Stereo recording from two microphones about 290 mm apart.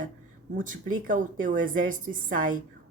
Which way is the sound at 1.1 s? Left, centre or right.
Right.